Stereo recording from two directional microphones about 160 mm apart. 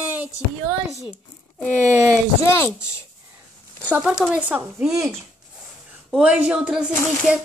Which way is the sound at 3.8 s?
5° right (ahead or behind).